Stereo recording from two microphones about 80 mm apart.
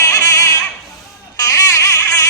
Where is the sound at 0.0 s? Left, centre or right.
Left.